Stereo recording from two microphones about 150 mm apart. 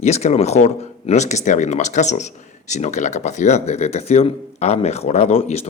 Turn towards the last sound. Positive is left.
turn(degrees=40)  # may be behind; listen again after turning